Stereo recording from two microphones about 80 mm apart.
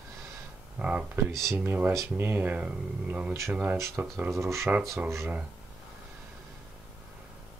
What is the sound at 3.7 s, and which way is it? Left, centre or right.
Speech, right.